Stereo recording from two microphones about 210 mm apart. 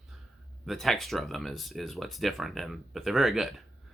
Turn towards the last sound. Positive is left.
turn(degrees=0)  # may be behind; listen again after turning